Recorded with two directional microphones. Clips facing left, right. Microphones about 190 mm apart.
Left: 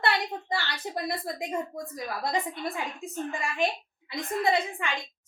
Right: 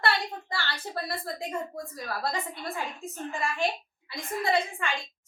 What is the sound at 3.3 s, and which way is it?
A woman's voice, 15° left (ahead or behind).